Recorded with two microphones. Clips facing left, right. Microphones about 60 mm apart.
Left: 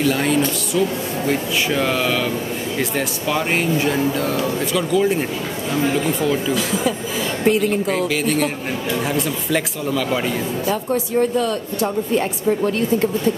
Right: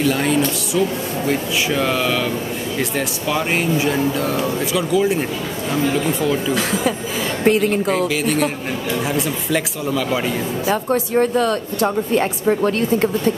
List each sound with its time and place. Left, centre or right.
0.1 s speech: centre
7.4 s speech: right
7.9 s speech: centre
10.7 s speech: right